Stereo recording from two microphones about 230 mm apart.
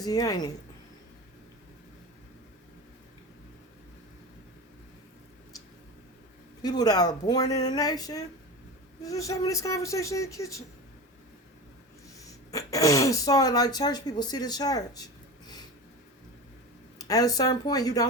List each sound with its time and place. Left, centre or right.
0.0 s speech: centre
6.6 s speech: centre
12.5 s speech: centre
17.0 s speech: centre